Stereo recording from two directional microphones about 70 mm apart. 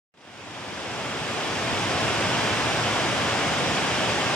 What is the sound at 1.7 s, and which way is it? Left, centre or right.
Pink noise, centre.